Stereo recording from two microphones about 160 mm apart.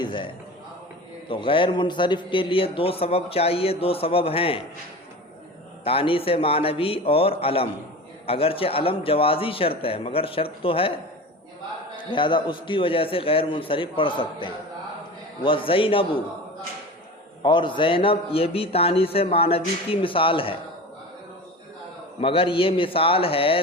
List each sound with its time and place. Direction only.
0.0 s a sound: 30° left (ahead or behind)
1.3 s a man's voice: 30° left (ahead or behind)
5.8 s a man's voice: 35° left (ahead or behind)
12.1 s a man's voice: 30° left (ahead or behind)
17.4 s a man's voice: 30° left (ahead or behind)
22.2 s a man's voice: 35° left (ahead or behind)